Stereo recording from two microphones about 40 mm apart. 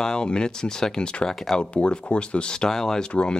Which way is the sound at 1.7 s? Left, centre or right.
Left.